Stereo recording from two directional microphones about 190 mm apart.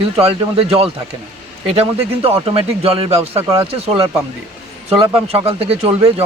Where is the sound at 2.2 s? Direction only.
30° right (ahead or behind).